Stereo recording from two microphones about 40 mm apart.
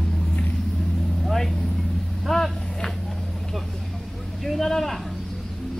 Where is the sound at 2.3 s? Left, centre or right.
Centre.